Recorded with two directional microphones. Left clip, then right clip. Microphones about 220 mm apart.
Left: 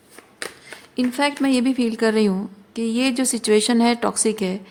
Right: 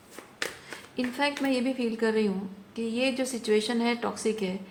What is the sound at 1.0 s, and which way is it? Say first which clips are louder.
A woman's voice: left 7 dB; 50° left (ahead or behind).